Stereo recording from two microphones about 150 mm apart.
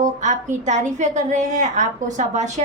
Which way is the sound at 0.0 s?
55° right (ahead or behind).